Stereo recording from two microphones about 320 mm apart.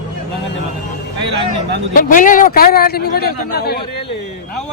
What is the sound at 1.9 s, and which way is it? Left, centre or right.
A man's voice, left.